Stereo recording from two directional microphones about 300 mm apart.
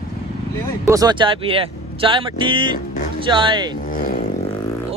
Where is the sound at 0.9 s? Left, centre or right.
Centre.